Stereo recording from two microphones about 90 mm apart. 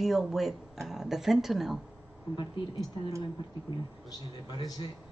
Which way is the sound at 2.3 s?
55° left (ahead or behind).